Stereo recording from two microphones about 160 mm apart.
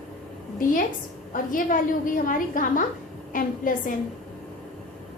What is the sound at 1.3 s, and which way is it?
A woman's voice, 55° left (ahead or behind).